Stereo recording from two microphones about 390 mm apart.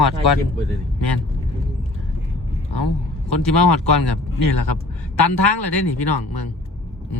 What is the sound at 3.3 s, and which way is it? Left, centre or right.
Speech, left.